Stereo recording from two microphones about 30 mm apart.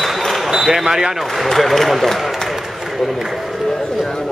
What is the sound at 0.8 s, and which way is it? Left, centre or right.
Speech, centre.